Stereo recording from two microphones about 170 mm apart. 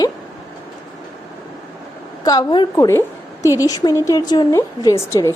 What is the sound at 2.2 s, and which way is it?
A woman's voice, 20° left (ahead or behind).